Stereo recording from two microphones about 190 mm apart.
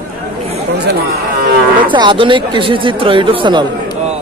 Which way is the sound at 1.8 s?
25° right (ahead or behind).